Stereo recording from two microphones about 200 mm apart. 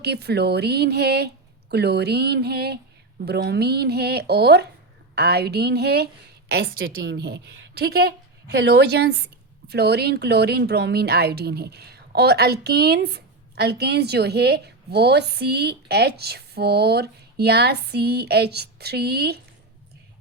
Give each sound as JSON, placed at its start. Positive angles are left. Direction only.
{"t": 0.0, "sound": "speech", "side_deg": -55}